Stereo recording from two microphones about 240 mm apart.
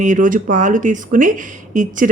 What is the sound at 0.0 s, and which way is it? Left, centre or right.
Speech, right.